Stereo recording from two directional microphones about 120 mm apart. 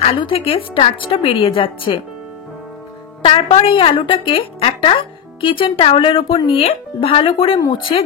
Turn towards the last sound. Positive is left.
turn(degrees=45)  # may be behind; listen again after turning